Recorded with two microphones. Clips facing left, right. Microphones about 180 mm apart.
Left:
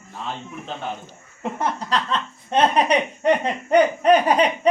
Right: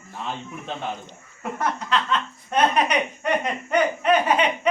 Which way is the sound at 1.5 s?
30° left (ahead or behind).